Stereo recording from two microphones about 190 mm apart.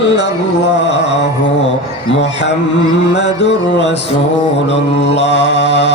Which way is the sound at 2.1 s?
70° left (ahead or behind).